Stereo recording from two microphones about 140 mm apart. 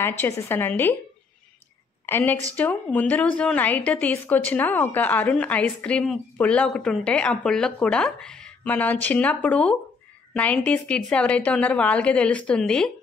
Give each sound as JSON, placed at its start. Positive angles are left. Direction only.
{"t": 0.2, "sound": "a woman's voice", "side_deg": 20}
{"t": 2.0, "sound": "a woman's voice", "side_deg": 15}